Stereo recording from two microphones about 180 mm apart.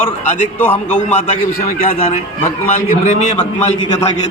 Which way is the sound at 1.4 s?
50° left (ahead or behind).